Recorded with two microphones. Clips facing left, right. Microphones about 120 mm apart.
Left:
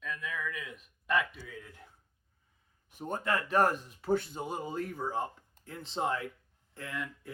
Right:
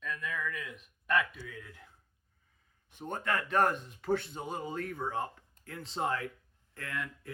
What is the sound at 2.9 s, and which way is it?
Speech, 10° left (ahead or behind).